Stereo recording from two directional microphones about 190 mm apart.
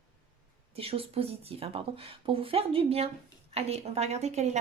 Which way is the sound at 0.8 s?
30° right (ahead or behind).